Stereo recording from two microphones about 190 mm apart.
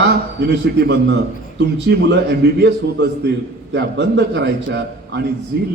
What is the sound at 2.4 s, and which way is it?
Speech, 60° right (ahead or behind).